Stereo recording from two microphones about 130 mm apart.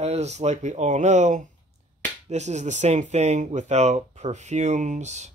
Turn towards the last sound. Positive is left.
turn(degrees=-60)  # may be behind; listen again after turning